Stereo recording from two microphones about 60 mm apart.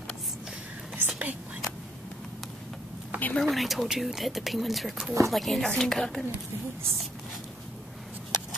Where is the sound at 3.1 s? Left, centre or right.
Right.